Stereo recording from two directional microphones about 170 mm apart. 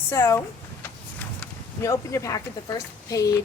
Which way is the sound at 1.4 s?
15° left (ahead or behind).